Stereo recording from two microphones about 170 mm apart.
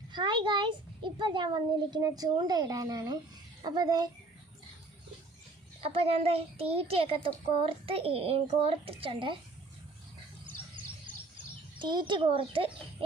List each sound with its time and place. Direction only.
0.1 s a child's voice: 25° right (ahead or behind)
5.8 s a child's voice: 35° right (ahead or behind)
11.8 s a child's voice: 25° right (ahead or behind)